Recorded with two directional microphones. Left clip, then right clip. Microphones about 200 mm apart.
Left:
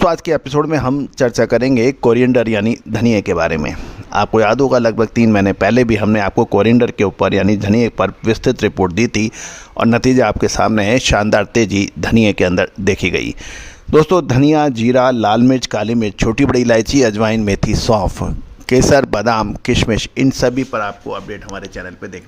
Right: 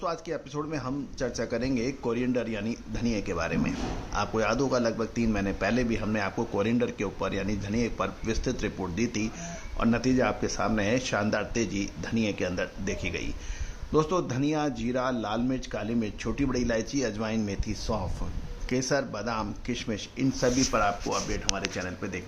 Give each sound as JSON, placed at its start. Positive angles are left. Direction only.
{"t": 0.0, "sound": "speech", "side_deg": 60}
{"t": 20.7, "sound": "speech", "side_deg": 35}